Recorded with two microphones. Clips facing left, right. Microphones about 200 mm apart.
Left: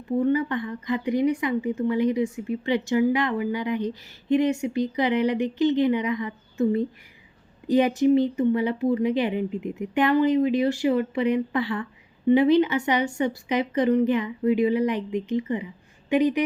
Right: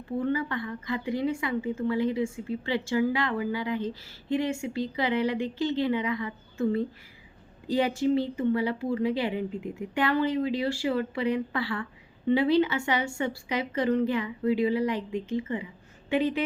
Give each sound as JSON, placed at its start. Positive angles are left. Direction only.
{"t": 0.2, "sound": "a woman's voice", "side_deg": 20}